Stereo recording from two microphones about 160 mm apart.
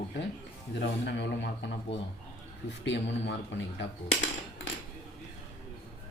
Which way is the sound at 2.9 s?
90° left.